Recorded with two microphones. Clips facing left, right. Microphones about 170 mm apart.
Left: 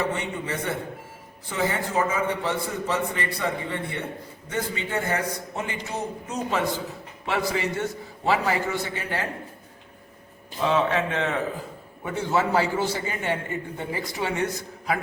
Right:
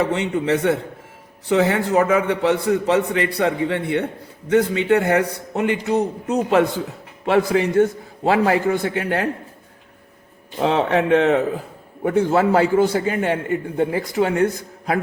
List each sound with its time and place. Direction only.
0.0 s a man's voice: 70° right (ahead or behind)
7.3 s a man's voice: 55° right (ahead or behind)
10.6 s a man's voice: 65° right (ahead or behind)